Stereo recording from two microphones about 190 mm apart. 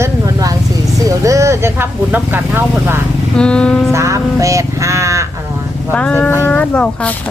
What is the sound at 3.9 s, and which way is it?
Speech, 15° right (ahead or behind).